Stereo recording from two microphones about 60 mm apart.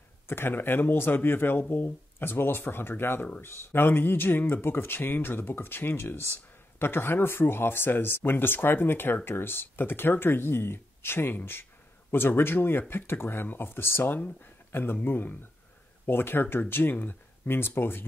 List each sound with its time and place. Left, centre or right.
0.3 s speech: left